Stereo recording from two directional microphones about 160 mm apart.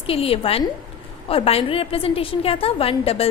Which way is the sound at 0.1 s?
35° left (ahead or behind).